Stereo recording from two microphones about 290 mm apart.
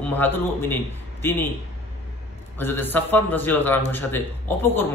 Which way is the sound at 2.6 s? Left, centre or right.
Centre.